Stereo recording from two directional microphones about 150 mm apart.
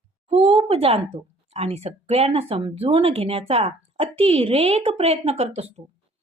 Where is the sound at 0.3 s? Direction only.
35° right (ahead or behind).